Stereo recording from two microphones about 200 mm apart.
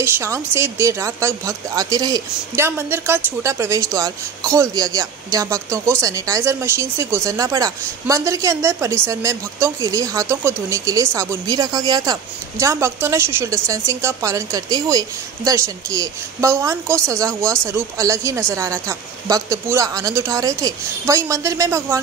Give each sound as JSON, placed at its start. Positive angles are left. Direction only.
{"t": 0.0, "sound": "speech", "side_deg": -15}